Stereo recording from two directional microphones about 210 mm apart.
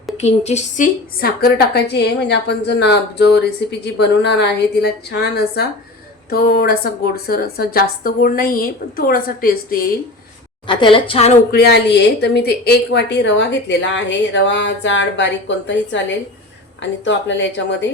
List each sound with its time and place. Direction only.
0.2 s speech: 30° left (ahead or behind)
1.2 s a woman's voice: 45° left (ahead or behind)
10.7 s a woman's voice: 25° left (ahead or behind)
11.5 s a woman's voice: 50° left (ahead or behind)